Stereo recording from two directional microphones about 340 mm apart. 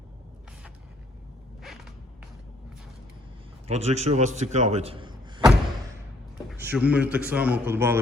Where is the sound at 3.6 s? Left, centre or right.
Centre.